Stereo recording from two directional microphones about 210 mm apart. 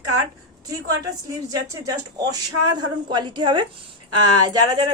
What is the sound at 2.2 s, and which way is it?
A woman's voice, 20° right (ahead or behind).